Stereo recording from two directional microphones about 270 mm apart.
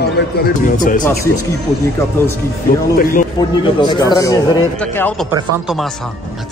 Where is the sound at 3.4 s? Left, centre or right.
Centre.